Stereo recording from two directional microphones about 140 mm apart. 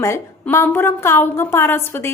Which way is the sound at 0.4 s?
15° left (ahead or behind).